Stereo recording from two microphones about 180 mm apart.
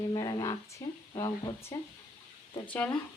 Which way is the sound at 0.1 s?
25° left (ahead or behind).